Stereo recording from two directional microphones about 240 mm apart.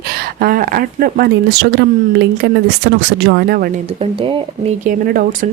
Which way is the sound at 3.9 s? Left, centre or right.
Right.